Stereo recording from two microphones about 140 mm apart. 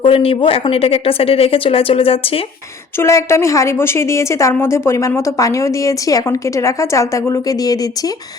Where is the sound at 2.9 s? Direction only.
20° left (ahead or behind).